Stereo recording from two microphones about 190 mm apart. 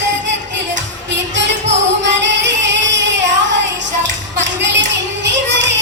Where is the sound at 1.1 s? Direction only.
70° right (ahead or behind).